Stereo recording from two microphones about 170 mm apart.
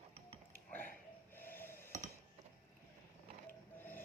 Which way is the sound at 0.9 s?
10° left (ahead or behind).